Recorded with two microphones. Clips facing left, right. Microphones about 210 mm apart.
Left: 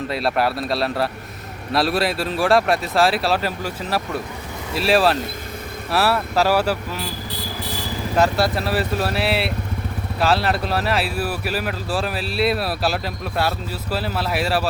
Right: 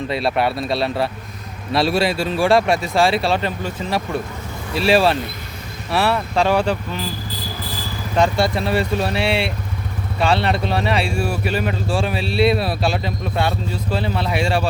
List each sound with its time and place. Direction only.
0.1 s speech: centre (ahead or behind)
8.1 s speech: 5° left (ahead or behind)